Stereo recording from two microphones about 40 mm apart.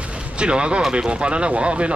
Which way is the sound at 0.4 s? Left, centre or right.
Right.